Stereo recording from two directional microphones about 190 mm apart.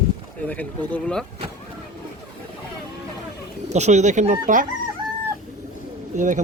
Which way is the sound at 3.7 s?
35° right (ahead or behind).